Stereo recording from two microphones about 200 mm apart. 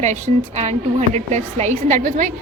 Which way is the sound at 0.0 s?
35° right (ahead or behind).